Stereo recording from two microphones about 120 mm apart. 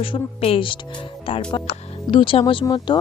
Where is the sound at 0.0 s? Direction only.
50° left (ahead or behind).